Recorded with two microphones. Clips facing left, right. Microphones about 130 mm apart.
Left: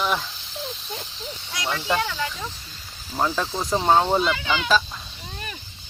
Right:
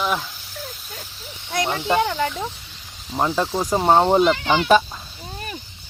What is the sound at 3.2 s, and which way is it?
Speech, 15° right (ahead or behind).